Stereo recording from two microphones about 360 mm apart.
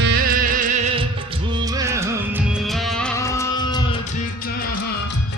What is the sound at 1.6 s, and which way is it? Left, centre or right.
Music, centre.